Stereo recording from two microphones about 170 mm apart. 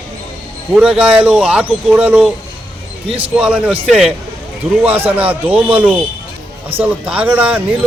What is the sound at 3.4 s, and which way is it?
Speech, 5° right (ahead or behind).